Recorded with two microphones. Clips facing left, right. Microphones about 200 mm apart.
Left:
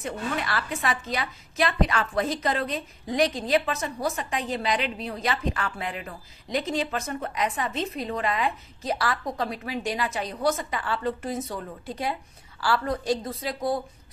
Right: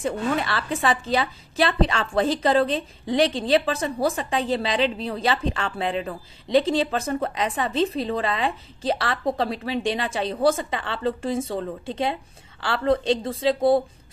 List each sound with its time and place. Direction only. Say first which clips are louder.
0.0 s a woman's voice: right 6 dB; 30° right (ahead or behind)